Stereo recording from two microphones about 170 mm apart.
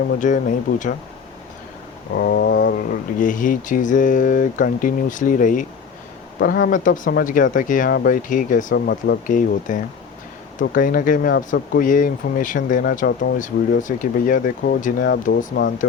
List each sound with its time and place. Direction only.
0.2 s speech: 50° left (ahead or behind)
2.1 s speech: 70° left (ahead or behind); by 5.6 s 50° left (ahead or behind)
6.4 s speech: 65° left (ahead or behind)
9.2 s speech: 50° left (ahead or behind)